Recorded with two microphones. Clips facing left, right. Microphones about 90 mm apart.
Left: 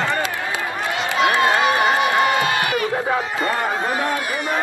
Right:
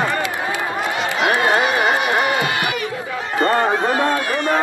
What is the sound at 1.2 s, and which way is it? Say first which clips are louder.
Run: left 1 dB; 20° right (ahead or behind).